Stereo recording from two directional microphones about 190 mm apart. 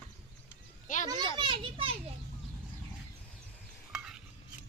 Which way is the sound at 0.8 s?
40° left (ahead or behind).